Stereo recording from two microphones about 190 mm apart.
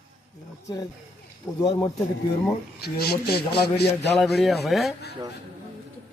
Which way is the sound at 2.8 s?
55° left (ahead or behind).